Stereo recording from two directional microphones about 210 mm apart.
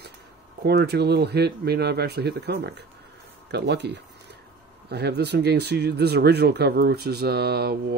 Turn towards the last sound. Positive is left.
turn(degrees=-50)  # may be behind; listen again after turning